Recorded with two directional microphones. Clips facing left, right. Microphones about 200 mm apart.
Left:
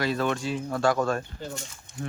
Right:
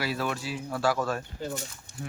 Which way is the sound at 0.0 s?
5° right (ahead or behind).